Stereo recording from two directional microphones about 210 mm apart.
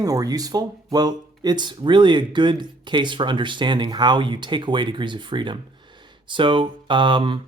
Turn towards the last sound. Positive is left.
turn(degrees=-25)  # may be behind; listen again after turning